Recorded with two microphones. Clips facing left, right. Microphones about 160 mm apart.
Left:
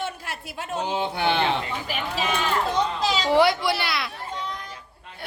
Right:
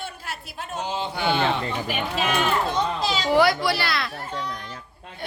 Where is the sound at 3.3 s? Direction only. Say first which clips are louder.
Even; 25° left (ahead or behind).